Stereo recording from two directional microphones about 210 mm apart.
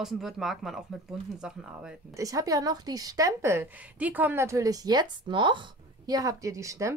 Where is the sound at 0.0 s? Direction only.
Centre (ahead or behind).